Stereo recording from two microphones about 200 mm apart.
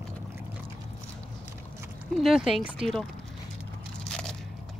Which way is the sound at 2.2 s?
Centre (ahead or behind).